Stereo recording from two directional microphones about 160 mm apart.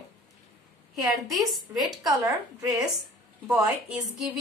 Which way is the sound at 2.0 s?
25° right (ahead or behind).